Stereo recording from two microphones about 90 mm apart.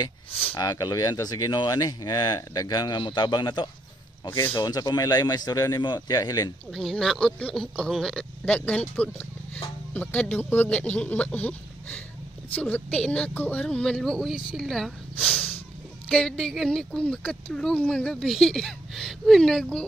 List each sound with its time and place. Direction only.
0.6 s speech: 45° left (ahead or behind)
3.0 s a man's voice: 60° left (ahead or behind)
6.7 s speech: 5° left (ahead or behind)